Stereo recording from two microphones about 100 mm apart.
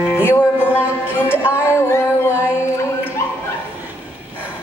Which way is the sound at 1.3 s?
25° left (ahead or behind).